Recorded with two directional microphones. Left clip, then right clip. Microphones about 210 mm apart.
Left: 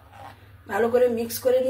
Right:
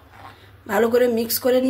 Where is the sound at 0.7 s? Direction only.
55° right (ahead or behind).